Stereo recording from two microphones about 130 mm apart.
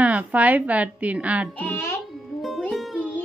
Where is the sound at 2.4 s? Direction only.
Centre (ahead or behind).